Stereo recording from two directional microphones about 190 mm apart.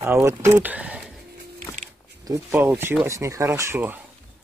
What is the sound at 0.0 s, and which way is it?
Speech, 15° right (ahead or behind).